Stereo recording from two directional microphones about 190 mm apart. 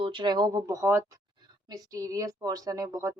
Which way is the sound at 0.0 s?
25° right (ahead or behind).